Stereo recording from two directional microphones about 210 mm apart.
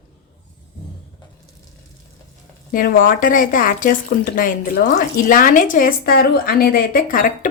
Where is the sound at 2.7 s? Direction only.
40° left (ahead or behind).